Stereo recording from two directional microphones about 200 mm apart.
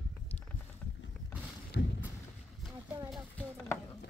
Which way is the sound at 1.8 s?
60° left (ahead or behind).